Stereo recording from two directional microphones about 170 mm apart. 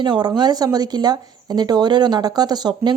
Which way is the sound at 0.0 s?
25° right (ahead or behind).